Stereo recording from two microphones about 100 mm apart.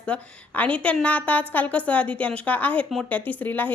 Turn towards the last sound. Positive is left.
turn(degrees=15)  # may be behind; listen again after turning